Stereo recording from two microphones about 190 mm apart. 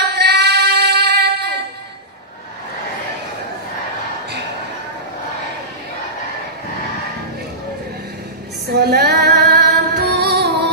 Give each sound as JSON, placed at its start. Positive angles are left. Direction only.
{"t": 0.0, "sound": "female singing", "side_deg": -60}
{"t": 8.6, "sound": "female singing", "side_deg": -55}